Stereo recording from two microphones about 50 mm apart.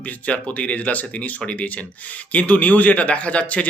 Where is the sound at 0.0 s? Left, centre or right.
Left.